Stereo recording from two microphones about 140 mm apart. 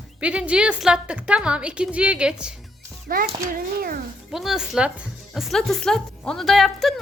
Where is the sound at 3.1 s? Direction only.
90° right.